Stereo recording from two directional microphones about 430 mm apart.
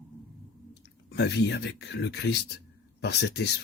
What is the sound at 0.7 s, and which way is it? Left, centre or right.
Speech, left.